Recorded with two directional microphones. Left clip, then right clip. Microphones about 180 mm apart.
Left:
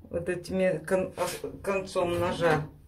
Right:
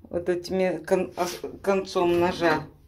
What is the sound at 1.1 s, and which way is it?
Speech, 45° right (ahead or behind).